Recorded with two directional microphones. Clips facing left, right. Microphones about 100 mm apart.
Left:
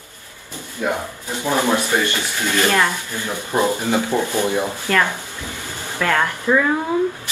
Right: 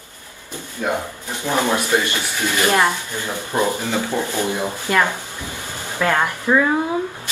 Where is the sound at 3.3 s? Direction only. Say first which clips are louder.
Left 1 dB; 20° left (ahead or behind).